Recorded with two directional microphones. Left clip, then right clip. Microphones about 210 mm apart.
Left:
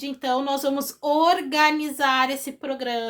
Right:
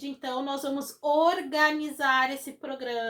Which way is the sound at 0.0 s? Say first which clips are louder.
Left 8 dB; 45° left (ahead or behind).